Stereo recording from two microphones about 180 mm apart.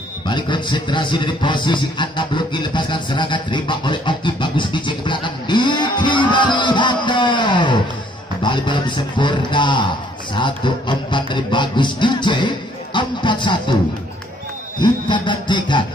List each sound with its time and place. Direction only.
0.3 s a man's voice: 25° left (ahead or behind)
10.3 s music: 25° left (ahead or behind)
14.8 s music: 25° left (ahead or behind)